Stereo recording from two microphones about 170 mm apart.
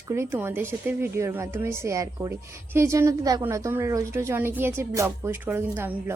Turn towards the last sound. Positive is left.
turn(degrees=-10)  # may be behind; listen again after turning